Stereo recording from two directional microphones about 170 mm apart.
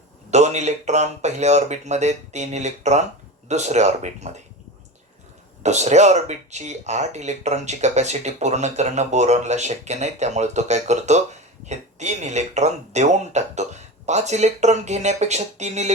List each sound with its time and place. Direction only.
0.3 s speech: 40° right (ahead or behind)
5.6 s speech: 40° right (ahead or behind)